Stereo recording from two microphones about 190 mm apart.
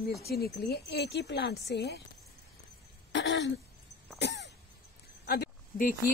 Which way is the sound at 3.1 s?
70° left (ahead or behind).